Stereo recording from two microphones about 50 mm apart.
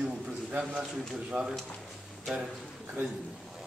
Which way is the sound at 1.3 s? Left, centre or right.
Right.